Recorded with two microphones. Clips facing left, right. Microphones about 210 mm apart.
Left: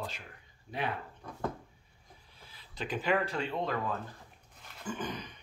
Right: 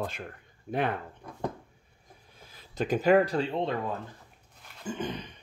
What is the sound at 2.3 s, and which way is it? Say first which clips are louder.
Speech: right 9 dB; 45° right (ahead or behind).